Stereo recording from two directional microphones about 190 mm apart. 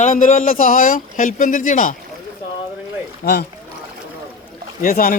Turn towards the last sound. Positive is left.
turn(degrees=40)  # may be behind; listen again after turning